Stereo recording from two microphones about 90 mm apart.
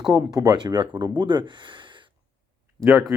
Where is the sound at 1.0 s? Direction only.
60° right (ahead or behind).